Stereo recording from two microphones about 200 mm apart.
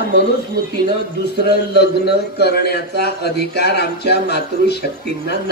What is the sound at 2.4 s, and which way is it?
A man's voice, 55° left (ahead or behind).